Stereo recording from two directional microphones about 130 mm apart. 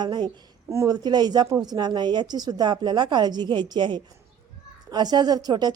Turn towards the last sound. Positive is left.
turn(degrees=-30)  # may be behind; listen again after turning